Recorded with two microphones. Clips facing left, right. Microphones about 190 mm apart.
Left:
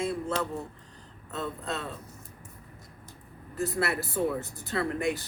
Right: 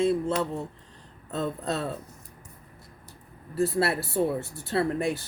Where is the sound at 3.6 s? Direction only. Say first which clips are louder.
Right 5 dB; 30° right (ahead or behind).